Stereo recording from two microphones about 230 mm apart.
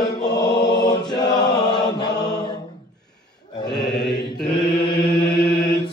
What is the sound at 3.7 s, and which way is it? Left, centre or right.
Mantra, centre.